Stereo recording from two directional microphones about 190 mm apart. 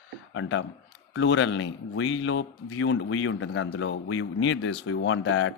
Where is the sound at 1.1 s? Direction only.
75° left (ahead or behind).